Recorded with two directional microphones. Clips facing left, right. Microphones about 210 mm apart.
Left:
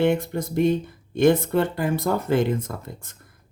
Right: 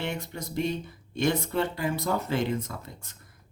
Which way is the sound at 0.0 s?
50° left (ahead or behind).